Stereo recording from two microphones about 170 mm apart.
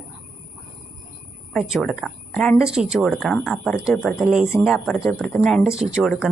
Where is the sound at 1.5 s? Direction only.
Centre (ahead or behind).